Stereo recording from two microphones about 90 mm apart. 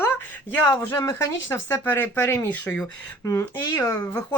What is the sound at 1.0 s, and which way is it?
Speech, 40° left (ahead or behind).